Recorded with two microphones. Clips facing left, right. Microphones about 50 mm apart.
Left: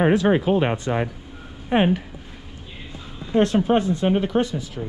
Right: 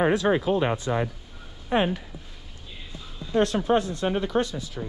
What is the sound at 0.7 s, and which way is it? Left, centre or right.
Speech, left.